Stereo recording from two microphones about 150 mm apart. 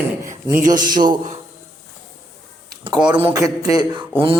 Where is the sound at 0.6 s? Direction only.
60° right (ahead or behind).